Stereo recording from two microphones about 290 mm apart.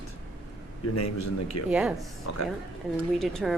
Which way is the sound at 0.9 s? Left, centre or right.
Left.